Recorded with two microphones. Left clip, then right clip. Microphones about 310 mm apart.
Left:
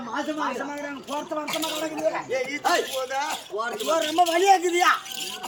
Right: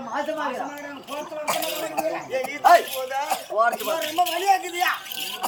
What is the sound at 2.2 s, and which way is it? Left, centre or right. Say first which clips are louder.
Speech: even; centre.